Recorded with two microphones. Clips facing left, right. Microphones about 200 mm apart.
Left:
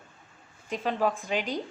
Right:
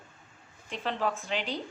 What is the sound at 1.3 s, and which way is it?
Speech, 45° left (ahead or behind).